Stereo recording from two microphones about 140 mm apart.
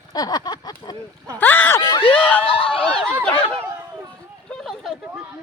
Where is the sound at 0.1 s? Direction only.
30° left (ahead or behind).